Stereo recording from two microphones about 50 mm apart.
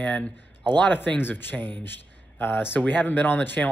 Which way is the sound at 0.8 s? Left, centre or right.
Left.